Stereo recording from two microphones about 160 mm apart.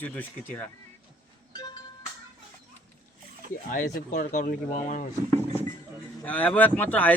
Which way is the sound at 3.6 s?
60° left (ahead or behind).